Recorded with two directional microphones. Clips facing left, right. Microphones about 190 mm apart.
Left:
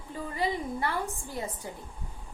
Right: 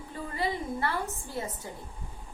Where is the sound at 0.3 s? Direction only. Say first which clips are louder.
Left 1 dB; 15° left (ahead or behind).